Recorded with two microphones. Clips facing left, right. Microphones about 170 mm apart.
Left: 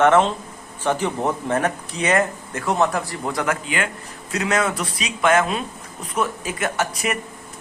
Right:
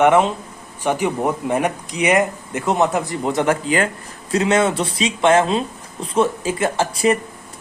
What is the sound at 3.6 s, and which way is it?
A man's voice, 35° right (ahead or behind).